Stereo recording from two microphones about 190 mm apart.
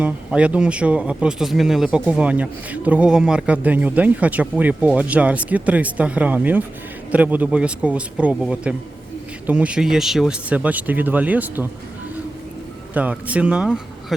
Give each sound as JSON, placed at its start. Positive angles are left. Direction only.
{"t": 0.0, "sound": "speech", "side_deg": -5}
{"t": 12.9, "sound": "speech", "side_deg": -10}